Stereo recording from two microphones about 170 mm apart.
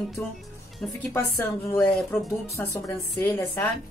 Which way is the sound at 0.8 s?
5° left (ahead or behind).